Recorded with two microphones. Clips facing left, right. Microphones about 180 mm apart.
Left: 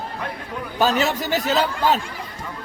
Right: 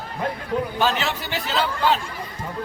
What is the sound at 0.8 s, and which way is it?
Speech, 40° left (ahead or behind).